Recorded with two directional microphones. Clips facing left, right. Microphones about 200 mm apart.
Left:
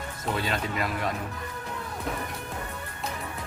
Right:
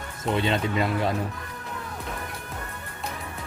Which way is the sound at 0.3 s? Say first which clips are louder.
Right 6 dB; 25° right (ahead or behind).